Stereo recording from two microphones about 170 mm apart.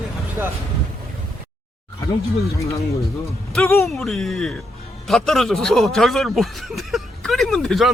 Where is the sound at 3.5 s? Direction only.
5° left (ahead or behind).